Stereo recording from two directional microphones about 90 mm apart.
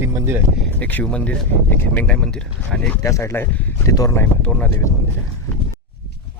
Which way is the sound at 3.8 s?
40° left (ahead or behind).